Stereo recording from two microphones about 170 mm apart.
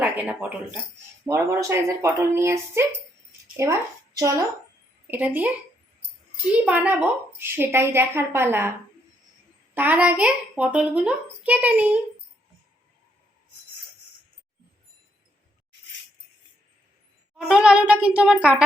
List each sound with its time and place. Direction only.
0.0 s a child's voice: 10° right (ahead or behind)
6.7 s a child's voice: 10° right (ahead or behind)
9.7 s a child's voice: 10° right (ahead or behind)
17.3 s a child's voice: 5° right (ahead or behind)